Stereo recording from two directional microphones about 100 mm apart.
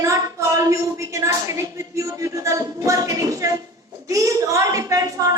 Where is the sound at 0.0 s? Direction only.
30° right (ahead or behind).